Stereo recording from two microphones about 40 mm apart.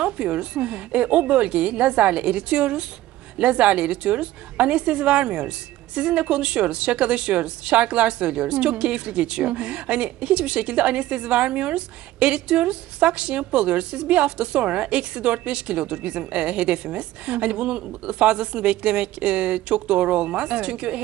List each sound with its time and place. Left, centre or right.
0.0 s a woman's voice: right